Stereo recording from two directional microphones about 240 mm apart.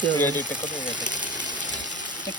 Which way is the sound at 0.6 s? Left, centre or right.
Left.